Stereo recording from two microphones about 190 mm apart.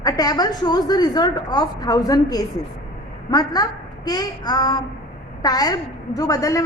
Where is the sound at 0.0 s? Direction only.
20° left (ahead or behind).